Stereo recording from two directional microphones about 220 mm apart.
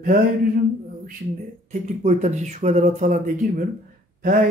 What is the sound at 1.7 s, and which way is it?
Speech, 35° right (ahead or behind).